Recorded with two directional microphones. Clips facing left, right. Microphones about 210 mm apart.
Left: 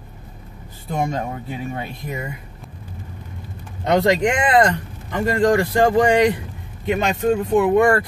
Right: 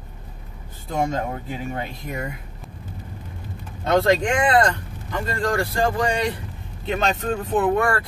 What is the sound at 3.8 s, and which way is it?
Speech, 15° left (ahead or behind).